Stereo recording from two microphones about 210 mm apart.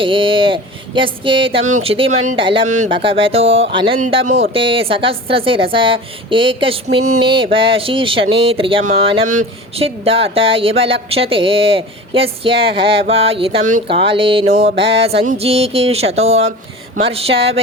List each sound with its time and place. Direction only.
0.0 s speech: 25° right (ahead or behind)